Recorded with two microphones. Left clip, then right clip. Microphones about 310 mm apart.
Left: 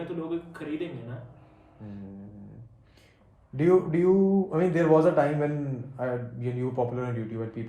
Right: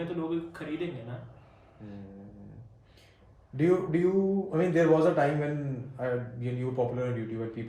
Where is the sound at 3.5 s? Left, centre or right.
Centre.